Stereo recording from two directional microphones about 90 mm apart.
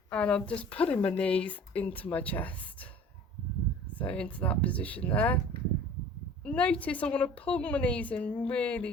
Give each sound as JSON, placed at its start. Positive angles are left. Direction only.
{"t": 0.1, "sound": "a woman's voice", "side_deg": 10}
{"t": 3.9, "sound": "a woman's voice", "side_deg": 15}
{"t": 6.4, "sound": "a woman's voice", "side_deg": 15}